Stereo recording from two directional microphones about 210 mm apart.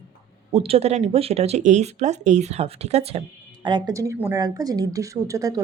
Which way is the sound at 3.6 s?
20° right (ahead or behind).